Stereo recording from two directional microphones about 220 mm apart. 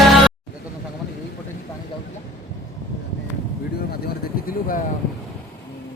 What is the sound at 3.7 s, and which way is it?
Vehicle, 45° left (ahead or behind).